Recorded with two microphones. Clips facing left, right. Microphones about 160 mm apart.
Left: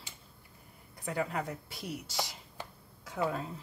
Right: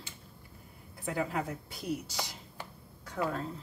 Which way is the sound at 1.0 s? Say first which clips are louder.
Right 1 dB; centre (ahead or behind).